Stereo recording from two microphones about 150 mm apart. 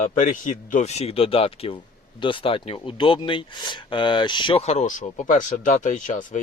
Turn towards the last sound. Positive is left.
turn(degrees=55)  # may be behind; listen again after turning